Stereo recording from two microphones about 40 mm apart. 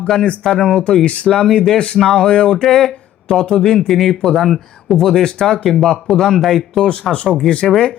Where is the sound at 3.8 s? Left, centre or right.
Centre.